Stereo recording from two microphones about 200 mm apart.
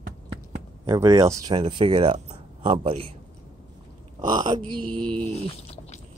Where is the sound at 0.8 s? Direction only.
15° right (ahead or behind).